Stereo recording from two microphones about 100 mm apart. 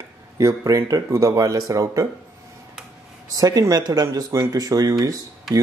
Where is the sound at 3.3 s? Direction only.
40° right (ahead or behind).